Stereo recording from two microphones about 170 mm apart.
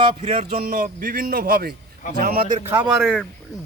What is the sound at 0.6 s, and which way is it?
Speech, 55° right (ahead or behind).